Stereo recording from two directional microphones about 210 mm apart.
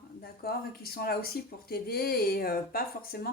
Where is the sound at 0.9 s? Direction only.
45° left (ahead or behind).